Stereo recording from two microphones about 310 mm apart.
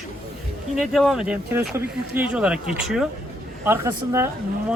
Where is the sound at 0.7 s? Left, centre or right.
Centre.